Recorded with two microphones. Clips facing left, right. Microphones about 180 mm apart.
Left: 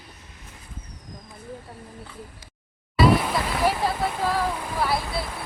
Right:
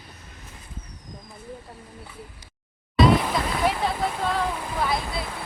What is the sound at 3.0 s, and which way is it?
Speech, centre (ahead or behind).